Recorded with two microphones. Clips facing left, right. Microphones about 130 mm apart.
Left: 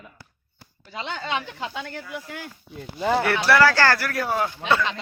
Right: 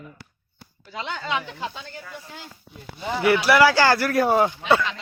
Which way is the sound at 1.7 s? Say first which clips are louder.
Left 5 dB; 75° left (ahead or behind).